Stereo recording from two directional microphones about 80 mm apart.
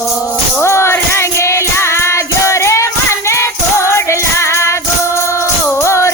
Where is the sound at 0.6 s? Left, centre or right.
Left.